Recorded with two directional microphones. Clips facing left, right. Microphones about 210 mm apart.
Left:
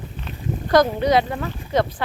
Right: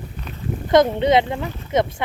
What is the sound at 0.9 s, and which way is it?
Speech, 25° right (ahead or behind).